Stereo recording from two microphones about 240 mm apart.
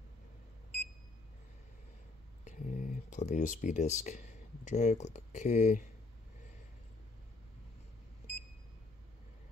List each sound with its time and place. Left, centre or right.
2.4 s speech: left